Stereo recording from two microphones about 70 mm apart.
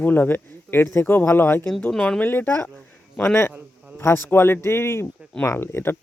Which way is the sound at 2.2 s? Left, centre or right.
Left.